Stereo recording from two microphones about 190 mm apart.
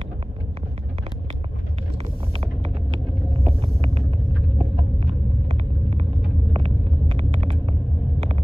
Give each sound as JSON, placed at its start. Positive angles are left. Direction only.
{"t": 3.4, "sound": "vehicle", "side_deg": -30}